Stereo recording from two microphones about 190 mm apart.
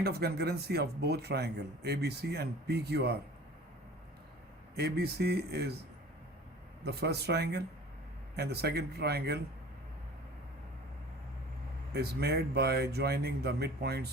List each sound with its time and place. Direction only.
0.0 s a man's voice: 55° right (ahead or behind)
4.8 s a man's voice: 55° right (ahead or behind)
6.8 s a man's voice: 60° right (ahead or behind)
11.9 s a man's voice: 55° right (ahead or behind)